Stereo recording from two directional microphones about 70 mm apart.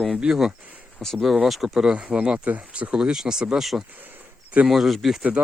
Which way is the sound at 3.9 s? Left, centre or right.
Right.